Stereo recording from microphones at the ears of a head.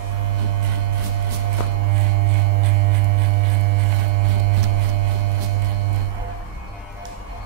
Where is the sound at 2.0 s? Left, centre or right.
Right.